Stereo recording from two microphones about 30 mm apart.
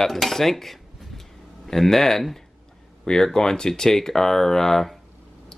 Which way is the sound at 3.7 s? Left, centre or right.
Centre.